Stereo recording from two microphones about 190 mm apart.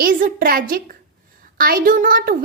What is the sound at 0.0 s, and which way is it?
A woman's voice, 50° right (ahead or behind).